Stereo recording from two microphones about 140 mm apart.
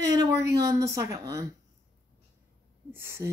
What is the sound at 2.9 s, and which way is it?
Speech, 20° right (ahead or behind).